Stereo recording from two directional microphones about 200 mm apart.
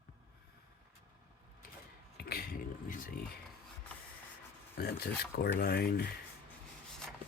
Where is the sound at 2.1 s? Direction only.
50° left (ahead or behind).